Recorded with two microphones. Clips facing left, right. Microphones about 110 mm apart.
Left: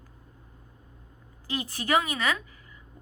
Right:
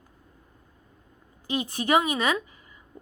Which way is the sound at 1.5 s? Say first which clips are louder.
Right 4 dB; 20° right (ahead or behind).